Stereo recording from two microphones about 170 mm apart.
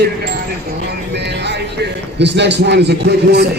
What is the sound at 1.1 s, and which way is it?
A man's voice, 90° right.